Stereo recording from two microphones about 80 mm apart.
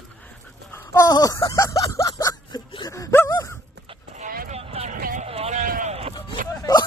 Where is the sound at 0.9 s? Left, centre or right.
Left.